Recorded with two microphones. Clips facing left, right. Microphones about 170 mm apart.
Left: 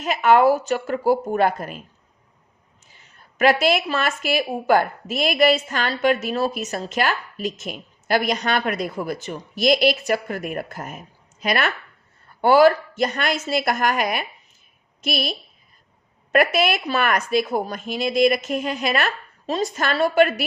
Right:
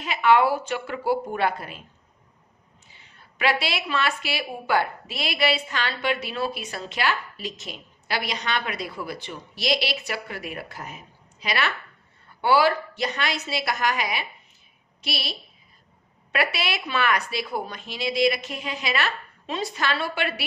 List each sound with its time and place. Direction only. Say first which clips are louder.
0.0 s a woman's voice: left 4 dB; 45° left (ahead or behind)
2.9 s a woman's voice: left 2 dB; 45° left (ahead or behind)